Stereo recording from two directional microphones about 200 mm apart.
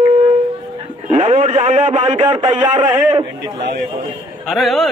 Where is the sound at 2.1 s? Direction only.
20° right (ahead or behind).